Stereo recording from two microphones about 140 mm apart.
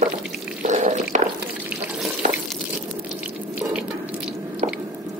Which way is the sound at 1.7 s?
5° right (ahead or behind).